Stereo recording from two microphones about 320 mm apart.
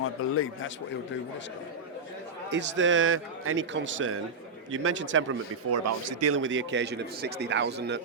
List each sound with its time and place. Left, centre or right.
0.0 s a man's voice: left
2.5 s speech: right